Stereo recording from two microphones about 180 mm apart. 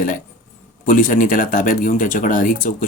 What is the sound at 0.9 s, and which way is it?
Speech, 50° left (ahead or behind).